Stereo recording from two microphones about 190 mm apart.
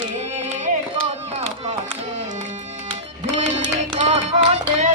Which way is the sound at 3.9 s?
35° right (ahead or behind).